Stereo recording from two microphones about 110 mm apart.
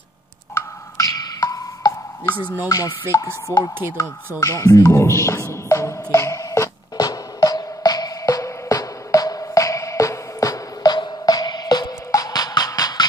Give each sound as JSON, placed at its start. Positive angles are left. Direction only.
{"t": 0.6, "sound": "music", "side_deg": 30}
{"t": 2.3, "sound": "speech", "side_deg": -15}
{"t": 2.7, "sound": "music", "side_deg": 30}
{"t": 3.5, "sound": "speech", "side_deg": -20}
{"t": 4.4, "sound": "music", "side_deg": 30}